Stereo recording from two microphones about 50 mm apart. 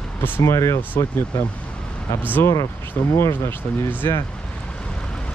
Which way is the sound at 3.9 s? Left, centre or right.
Left.